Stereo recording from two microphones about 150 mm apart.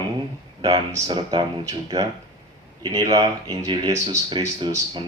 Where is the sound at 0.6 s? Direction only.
30° right (ahead or behind).